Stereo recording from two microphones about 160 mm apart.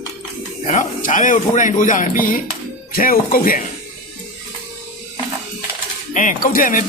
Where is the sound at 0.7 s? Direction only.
55° left (ahead or behind).